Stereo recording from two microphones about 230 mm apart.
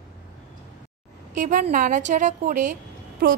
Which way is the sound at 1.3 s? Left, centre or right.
Right.